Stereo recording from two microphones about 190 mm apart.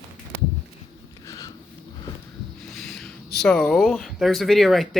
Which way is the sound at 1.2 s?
20° left (ahead or behind).